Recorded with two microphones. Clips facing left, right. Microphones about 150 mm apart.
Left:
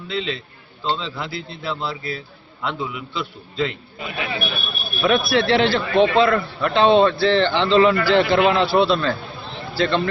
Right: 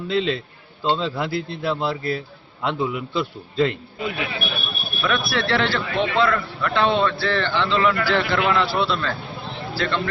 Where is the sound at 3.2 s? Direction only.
45° right (ahead or behind).